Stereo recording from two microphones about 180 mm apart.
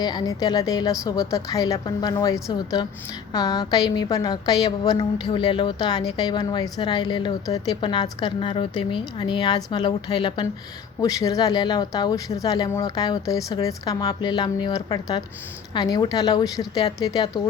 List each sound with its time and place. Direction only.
0.0 s a woman's voice: 20° left (ahead or behind)